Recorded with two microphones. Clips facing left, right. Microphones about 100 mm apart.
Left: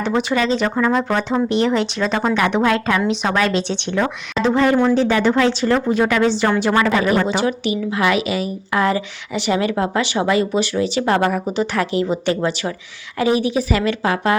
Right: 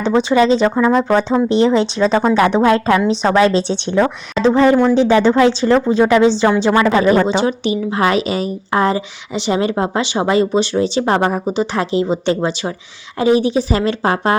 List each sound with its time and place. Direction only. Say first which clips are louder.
0.1 s speech: right 7 dB; 25° right (ahead or behind)
0.8 s speech: right 4 dB; 15° right (ahead or behind)
1.5 s a woman's voice: right 4 dB; 30° right (ahead or behind)
6.7 s speech: right 3 dB; 15° right (ahead or behind)
6.9 s a woman's voice: right 4 dB; 25° right (ahead or behind)